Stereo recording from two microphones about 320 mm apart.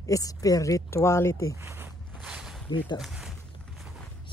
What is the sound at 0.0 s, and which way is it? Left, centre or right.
Speech, centre.